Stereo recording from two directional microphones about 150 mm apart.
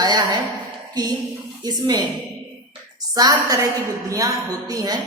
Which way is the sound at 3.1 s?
25° right (ahead or behind).